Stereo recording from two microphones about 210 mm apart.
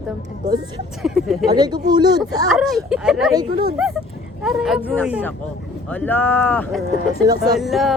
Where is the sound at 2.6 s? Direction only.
Centre (ahead or behind).